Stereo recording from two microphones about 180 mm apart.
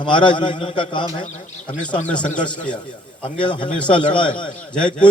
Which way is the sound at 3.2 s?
25° left (ahead or behind).